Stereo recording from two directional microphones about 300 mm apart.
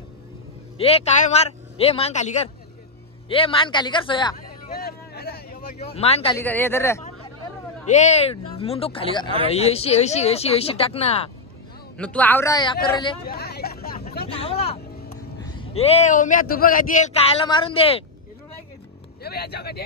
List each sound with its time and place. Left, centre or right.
0.7 s a man's voice: centre
4.7 s a sound: left
5.9 s speech: centre
6.4 s a man's voice: centre
7.9 s speech: left
12.0 s a man's voice: centre
13.2 s hubbub: left
14.3 s music: centre
15.6 s speech: centre
19.2 s speech: left